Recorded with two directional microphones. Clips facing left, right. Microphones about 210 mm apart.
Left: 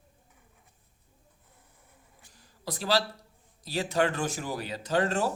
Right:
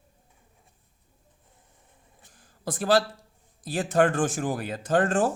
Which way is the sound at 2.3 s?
50° right (ahead or behind).